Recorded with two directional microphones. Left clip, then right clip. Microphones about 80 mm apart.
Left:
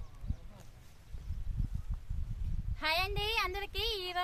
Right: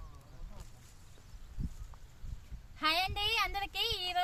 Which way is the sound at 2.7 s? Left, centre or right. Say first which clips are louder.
Right 1 dB; left.